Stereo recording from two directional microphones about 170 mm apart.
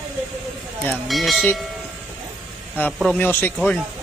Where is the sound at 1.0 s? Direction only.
Centre (ahead or behind).